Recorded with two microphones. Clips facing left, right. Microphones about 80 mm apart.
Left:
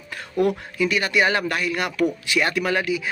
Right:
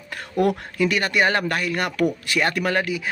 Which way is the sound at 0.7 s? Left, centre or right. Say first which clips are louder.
Right 1 dB; right.